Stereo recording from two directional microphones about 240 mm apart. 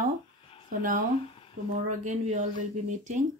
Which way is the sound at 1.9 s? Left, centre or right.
Right.